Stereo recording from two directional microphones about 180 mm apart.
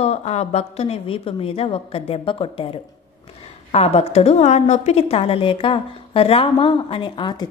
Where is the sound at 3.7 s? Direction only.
35° left (ahead or behind).